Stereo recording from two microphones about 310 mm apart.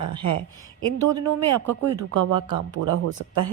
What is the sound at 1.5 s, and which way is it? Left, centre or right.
Speech, right.